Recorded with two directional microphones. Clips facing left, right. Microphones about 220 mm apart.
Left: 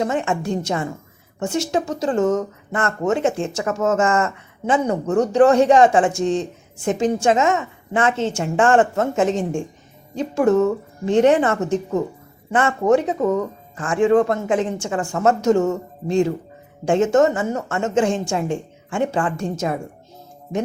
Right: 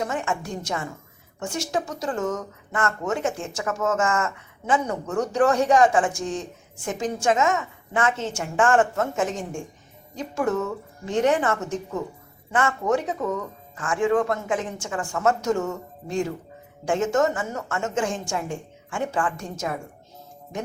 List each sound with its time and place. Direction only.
0.0 s speech: 25° left (ahead or behind)